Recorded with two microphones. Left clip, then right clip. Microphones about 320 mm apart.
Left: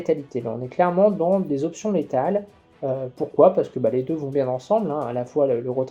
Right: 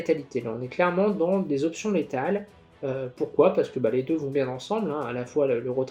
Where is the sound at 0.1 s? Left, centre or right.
Left.